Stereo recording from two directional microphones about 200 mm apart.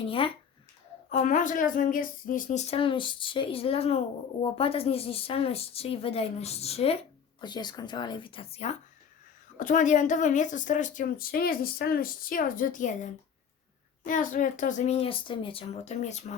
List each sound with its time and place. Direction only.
1.1 s a woman's voice: 40° left (ahead or behind)